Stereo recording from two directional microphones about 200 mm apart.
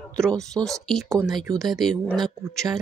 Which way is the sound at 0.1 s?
5° left (ahead or behind).